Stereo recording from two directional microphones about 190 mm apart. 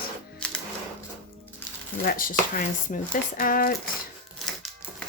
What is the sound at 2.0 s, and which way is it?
Speech, 45° left (ahead or behind).